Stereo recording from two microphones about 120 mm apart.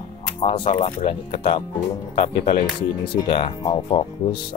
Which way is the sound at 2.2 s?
45° left (ahead or behind).